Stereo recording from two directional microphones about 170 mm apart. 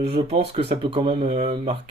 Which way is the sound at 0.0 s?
35° right (ahead or behind).